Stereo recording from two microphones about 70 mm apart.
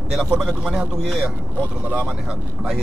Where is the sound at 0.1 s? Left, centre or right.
Centre.